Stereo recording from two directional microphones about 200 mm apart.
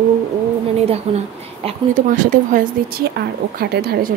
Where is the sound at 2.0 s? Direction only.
40° right (ahead or behind).